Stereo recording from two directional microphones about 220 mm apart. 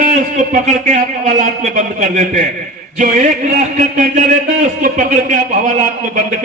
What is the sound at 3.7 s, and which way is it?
A man's voice, 35° right (ahead or behind).